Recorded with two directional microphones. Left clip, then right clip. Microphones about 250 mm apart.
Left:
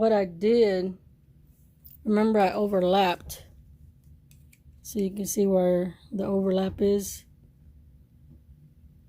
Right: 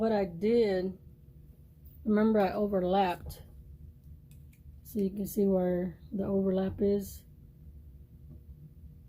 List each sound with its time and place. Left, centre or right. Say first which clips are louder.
0.0 s speech: left 7 dB; left
2.0 s speech: left 5 dB; left
4.9 s speech: left 4 dB; left